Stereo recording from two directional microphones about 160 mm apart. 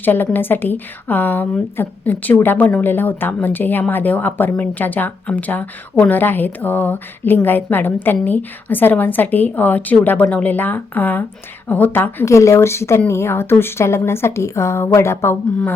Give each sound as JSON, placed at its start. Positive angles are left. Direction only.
{"t": 0.0, "sound": "a woman's voice", "side_deg": 10}